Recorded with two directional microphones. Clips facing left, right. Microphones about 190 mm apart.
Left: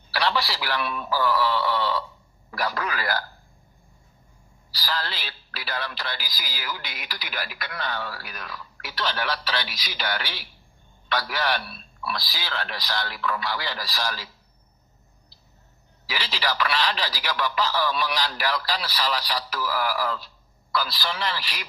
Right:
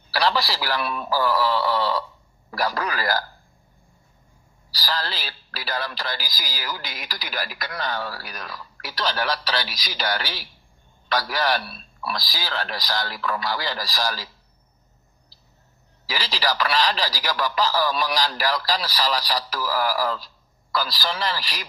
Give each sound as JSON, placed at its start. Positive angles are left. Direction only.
{"t": 0.1, "sound": "speech", "side_deg": -40}
{"t": 4.7, "sound": "speech", "side_deg": -40}
{"t": 16.0, "sound": "speech", "side_deg": -40}